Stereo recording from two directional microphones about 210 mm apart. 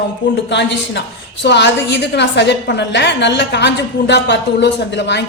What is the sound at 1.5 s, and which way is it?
A man's voice, 55° left (ahead or behind).